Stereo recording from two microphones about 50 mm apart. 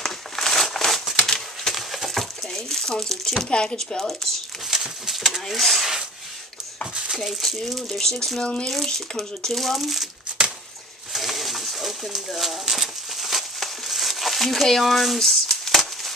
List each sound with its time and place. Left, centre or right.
0.0 s crumpling: centre
1.2 s a sound: centre
1.8 s crumpling: centre
3.5 s speech: centre
4.6 s bird: centre
5.2 s speech: centre
7.2 s speech: centre; by 8.6 s left
8.6 s speech: centre
11.1 s pigeon: centre